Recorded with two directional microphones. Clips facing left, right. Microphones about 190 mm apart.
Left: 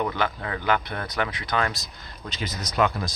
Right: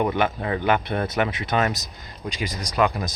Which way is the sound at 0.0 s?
20° right (ahead or behind).